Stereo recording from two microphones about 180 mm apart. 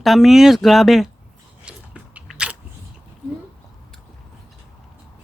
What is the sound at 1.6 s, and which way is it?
Biting, 5° right (ahead or behind).